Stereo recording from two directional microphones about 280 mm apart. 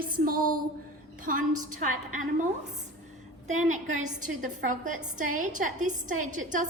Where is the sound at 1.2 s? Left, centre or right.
Right.